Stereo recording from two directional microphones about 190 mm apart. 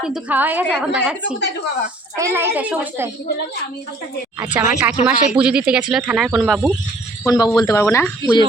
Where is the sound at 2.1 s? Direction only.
15° right (ahead or behind).